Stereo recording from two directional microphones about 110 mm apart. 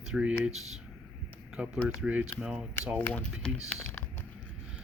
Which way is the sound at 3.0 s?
10° left (ahead or behind).